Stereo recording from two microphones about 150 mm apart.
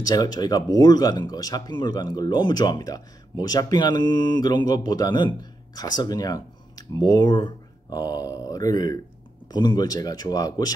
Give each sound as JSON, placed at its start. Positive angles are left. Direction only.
{"t": 0.0, "sound": "speech", "side_deg": 25}